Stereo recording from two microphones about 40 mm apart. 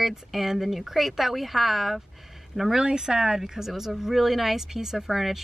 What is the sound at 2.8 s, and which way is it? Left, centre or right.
Speech, centre.